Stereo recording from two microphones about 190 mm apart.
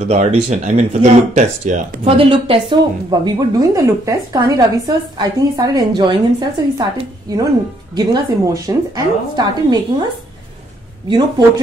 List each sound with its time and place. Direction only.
0.1 s speech: 35° right (ahead or behind)
11.1 s speech: 25° right (ahead or behind)